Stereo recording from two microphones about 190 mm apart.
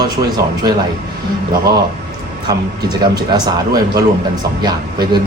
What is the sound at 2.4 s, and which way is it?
Speech, 20° right (ahead or behind).